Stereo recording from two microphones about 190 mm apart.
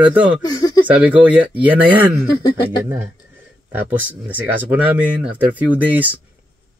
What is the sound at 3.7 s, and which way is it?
Speech, 10° right (ahead or behind).